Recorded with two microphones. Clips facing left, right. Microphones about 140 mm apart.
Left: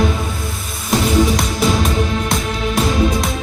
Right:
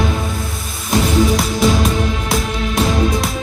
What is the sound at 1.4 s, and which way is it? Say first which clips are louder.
Music: right 2 dB; centre (ahead or behind).